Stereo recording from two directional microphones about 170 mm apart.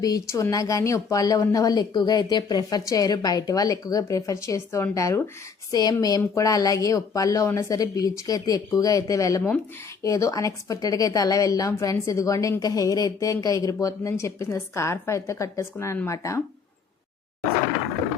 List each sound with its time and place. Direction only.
0.0 s a woman's voice: 20° left (ahead or behind)